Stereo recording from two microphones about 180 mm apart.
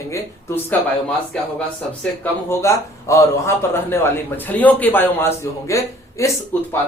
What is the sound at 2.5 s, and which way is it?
A man's voice, 15° left (ahead or behind).